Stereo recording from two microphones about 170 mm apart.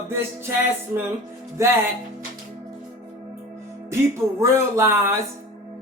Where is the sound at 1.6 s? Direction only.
15° right (ahead or behind).